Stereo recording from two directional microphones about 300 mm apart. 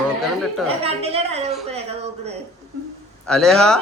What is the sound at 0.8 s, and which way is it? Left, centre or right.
Speech, centre.